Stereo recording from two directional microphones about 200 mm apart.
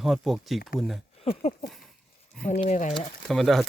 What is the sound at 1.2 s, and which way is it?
Speech, 30° left (ahead or behind).